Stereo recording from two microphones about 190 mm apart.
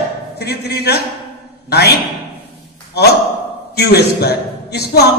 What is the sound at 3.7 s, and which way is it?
A man's voice, 60° left (ahead or behind).